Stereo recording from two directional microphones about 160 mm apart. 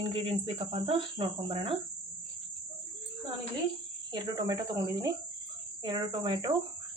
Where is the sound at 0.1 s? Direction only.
35° right (ahead or behind).